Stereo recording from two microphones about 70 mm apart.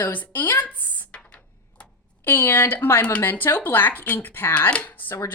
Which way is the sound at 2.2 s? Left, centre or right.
Left.